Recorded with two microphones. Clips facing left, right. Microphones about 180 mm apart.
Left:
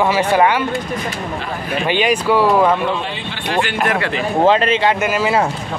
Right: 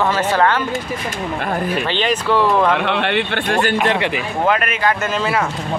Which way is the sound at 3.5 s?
45° right (ahead or behind).